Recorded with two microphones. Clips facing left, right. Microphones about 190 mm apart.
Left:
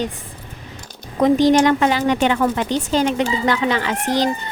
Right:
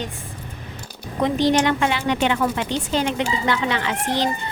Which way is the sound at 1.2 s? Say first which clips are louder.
Left 5 dB; 45° left (ahead or behind).